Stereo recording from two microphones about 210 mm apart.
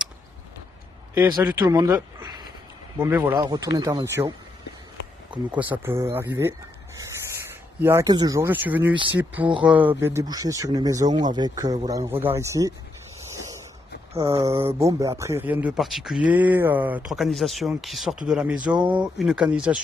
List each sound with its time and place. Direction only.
1.3 s speech: 15° right (ahead or behind)
2.0 s a sound: 15° right (ahead or behind)
3.0 s speech: 10° right (ahead or behind)
5.6 s speech: 10° right (ahead or behind)
7.8 s speech: 15° right (ahead or behind)
14.3 s speech: 15° right (ahead or behind)